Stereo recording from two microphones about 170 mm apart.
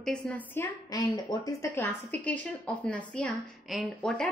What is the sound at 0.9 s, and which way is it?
A woman's voice, 20° left (ahead or behind).